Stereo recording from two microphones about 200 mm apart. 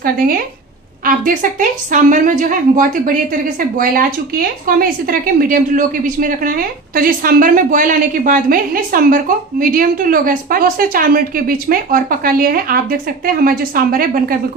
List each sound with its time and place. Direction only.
1.0 s a woman's voice: 40° right (ahead or behind)